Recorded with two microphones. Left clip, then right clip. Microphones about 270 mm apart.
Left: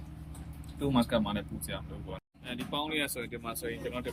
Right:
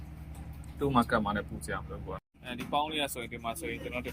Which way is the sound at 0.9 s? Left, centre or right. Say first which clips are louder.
Right 2 dB; centre.